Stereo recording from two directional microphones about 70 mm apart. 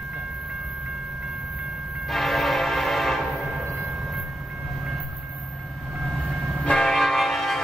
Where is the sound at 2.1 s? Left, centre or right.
Centre.